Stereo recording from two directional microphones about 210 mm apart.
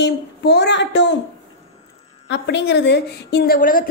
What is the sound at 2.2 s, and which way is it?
Speech, 55° left (ahead or behind).